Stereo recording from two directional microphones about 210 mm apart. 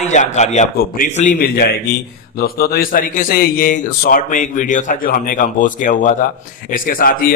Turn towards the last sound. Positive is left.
turn(degrees=40)  # may be behind; listen again after turning